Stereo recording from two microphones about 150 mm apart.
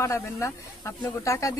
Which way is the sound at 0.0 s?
20° left (ahead or behind).